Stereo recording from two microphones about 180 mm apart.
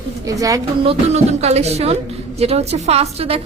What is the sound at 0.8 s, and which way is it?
A woman's voice, 35° right (ahead or behind).